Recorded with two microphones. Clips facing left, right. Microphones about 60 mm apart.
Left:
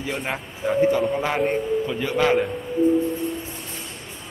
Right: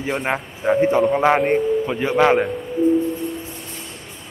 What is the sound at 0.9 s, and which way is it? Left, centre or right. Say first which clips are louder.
Speech: right 6 dB; right.